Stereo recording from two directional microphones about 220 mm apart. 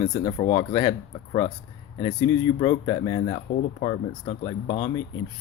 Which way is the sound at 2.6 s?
20° left (ahead or behind).